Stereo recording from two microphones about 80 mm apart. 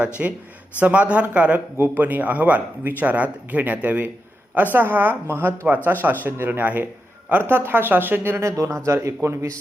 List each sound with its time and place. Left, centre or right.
0.0 s speech: centre; by 9.5 s right